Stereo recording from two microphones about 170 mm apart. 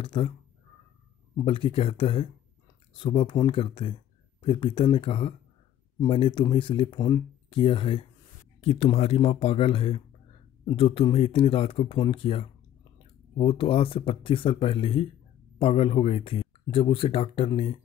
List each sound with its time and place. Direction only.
0.0 s speech: 30° left (ahead or behind)
1.3 s speech: 30° left (ahead or behind)